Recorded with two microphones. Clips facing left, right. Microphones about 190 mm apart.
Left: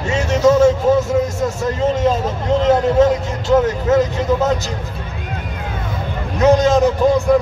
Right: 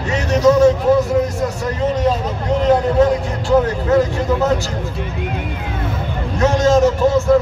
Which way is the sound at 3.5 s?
20° left (ahead or behind).